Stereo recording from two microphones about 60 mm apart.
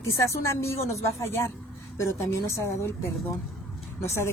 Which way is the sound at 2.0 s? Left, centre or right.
Left.